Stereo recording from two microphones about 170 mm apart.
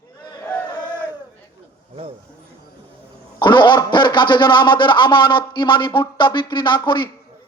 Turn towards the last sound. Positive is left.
turn(degrees=25)  # may be behind; listen again after turning